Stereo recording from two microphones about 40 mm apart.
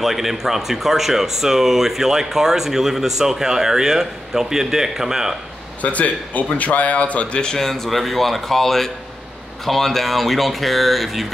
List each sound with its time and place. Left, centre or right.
0.0 s speech: centre
5.8 s speech: left
7.5 s speech: centre